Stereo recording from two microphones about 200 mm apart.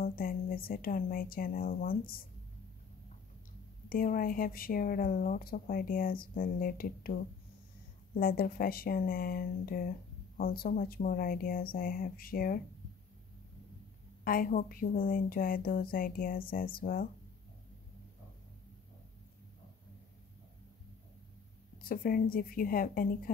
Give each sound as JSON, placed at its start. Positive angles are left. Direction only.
{"t": 0.0, "sound": "speech", "side_deg": 45}
{"t": 3.9, "sound": "speech", "side_deg": 45}
{"t": 14.2, "sound": "speech", "side_deg": 45}
{"t": 21.8, "sound": "speech", "side_deg": 45}